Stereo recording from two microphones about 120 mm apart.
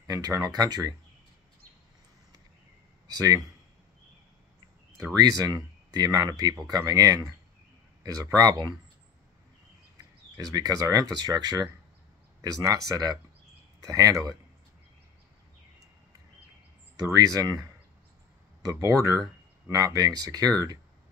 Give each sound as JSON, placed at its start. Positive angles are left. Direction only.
{"t": 0.0, "sound": "speech", "side_deg": -30}
{"t": 3.2, "sound": "speech", "side_deg": -30}
{"t": 5.4, "sound": "speech", "side_deg": -35}
{"t": 10.5, "sound": "speech", "side_deg": -30}
{"t": 17.1, "sound": "speech", "side_deg": -30}
{"t": 18.7, "sound": "speech", "side_deg": -30}